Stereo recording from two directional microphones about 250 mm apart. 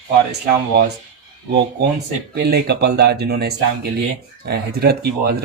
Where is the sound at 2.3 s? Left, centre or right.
Right.